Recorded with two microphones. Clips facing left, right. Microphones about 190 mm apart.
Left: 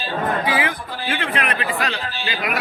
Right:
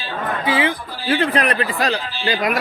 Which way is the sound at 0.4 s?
25° right (ahead or behind).